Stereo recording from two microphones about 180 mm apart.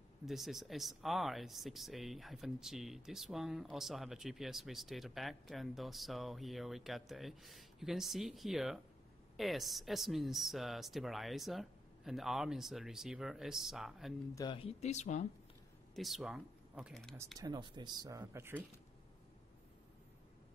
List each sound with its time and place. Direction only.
0.2 s speech: centre (ahead or behind)
14.3 s speech: 25° left (ahead or behind); by 15.2 s 40° left (ahead or behind)
15.9 s speech: centre (ahead or behind)
17.4 s speech: 25° right (ahead or behind)